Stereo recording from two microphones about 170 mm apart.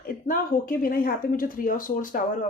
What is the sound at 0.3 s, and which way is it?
Speech, 60° left (ahead or behind).